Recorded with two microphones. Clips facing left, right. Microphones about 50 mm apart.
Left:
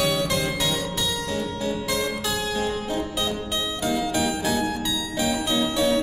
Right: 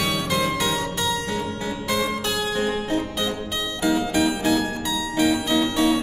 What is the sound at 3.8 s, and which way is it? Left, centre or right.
Music, right.